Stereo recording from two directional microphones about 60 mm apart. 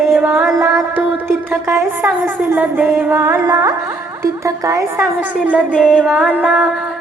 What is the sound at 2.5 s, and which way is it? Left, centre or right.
Music, right.